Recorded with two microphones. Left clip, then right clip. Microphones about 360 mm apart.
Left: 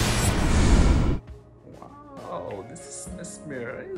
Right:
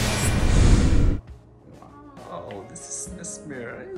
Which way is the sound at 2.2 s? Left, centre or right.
Centre.